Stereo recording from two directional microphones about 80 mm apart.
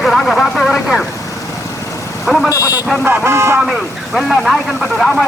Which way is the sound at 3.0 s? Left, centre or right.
Right.